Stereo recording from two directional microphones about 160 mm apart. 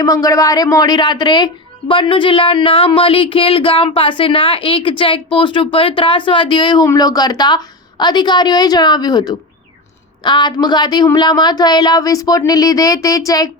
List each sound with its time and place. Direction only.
0.0 s speech: 20° left (ahead or behind)